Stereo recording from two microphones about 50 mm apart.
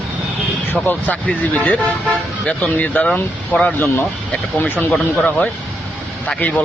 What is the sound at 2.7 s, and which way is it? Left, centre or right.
Speech, left.